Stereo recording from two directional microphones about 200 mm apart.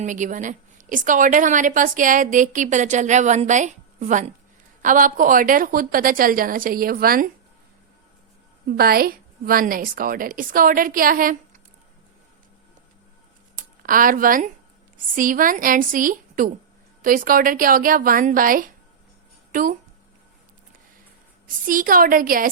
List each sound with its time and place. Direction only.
0.0 s a woman's voice: 40° right (ahead or behind)
8.6 s a woman's voice: 50° right (ahead or behind)
13.6 s a woman's voice: 45° right (ahead or behind)
21.4 s a woman's voice: 45° right (ahead or behind)